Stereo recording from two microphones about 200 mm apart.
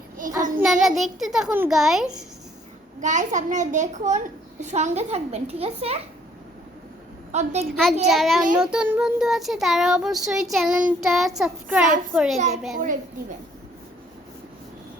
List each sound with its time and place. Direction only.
0.2 s a child's voice: 40° right (ahead or behind)
0.6 s child singing: centre (ahead or behind)
3.0 s a child's voice: 40° right (ahead or behind)
7.3 s a child's voice: 35° right (ahead or behind)
7.7 s child singing: centre (ahead or behind)